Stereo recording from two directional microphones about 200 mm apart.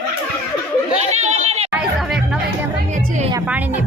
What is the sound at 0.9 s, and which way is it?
Chatter, 35° right (ahead or behind).